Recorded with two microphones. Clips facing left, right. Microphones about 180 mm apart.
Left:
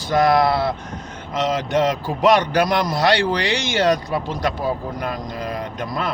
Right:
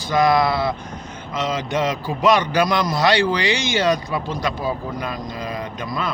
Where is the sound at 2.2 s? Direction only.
65° left (ahead or behind).